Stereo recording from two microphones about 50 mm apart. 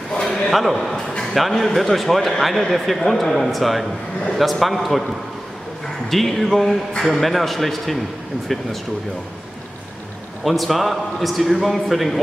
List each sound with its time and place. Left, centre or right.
0.5 s a man's voice: centre
10.4 s a man's voice: centre